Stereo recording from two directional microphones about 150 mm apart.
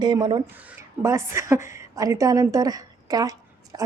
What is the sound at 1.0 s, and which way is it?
Speech, 20° right (ahead or behind).